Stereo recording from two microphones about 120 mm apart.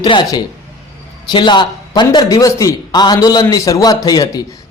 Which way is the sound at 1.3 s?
40° left (ahead or behind).